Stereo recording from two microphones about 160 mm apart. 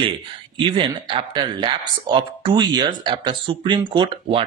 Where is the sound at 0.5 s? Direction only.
30° right (ahead or behind).